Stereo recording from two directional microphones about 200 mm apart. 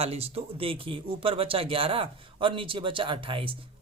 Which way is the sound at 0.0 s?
30° right (ahead or behind).